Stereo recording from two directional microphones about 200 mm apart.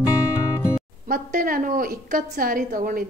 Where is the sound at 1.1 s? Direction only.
45° right (ahead or behind).